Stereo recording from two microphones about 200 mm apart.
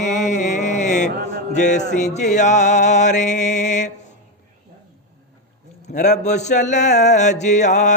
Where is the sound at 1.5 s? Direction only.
35° left (ahead or behind).